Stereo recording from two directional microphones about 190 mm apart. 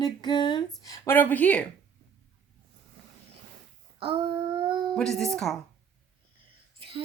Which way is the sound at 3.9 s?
25° right (ahead or behind).